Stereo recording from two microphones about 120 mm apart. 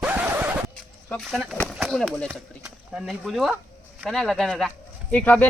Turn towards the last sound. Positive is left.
turn(degrees=15)  # may be behind; listen again after turning